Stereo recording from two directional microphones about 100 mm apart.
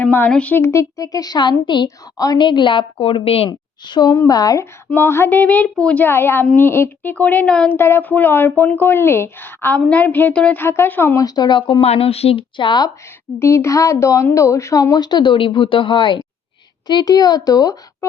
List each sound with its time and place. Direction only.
0.0 s a sound: 20° left (ahead or behind)
0.3 s speech: 15° left (ahead or behind)
0.6 s speech: 30° left (ahead or behind); by 1.9 s 50° left (ahead or behind)
2.1 s speech: 35° left (ahead or behind)
2.4 s a woman's voice: 55° left (ahead or behind); by 3.5 s 75° left (ahead or behind)
3.8 s speech: 50° left (ahead or behind)
4.1 s speech: 35° left (ahead or behind)
4.9 s speech: 25° left (ahead or behind)
7.8 s speech: 25° left (ahead or behind)
11.3 s speech: 45° left (ahead or behind)
11.6 s speech: 70° left (ahead or behind); by 12.9 s 50° left (ahead or behind)
13.4 s speech: 30° left (ahead or behind)